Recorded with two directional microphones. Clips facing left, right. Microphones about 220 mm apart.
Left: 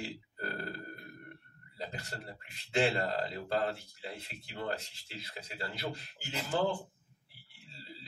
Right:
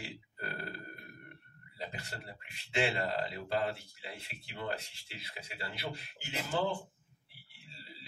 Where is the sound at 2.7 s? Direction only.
40° left (ahead or behind).